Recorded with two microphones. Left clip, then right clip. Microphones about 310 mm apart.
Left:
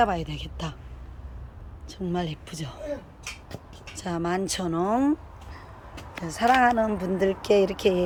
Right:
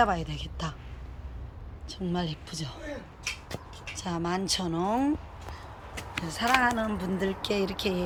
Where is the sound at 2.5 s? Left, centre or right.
Left.